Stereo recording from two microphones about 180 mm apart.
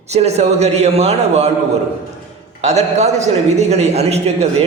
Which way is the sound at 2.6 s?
40° right (ahead or behind).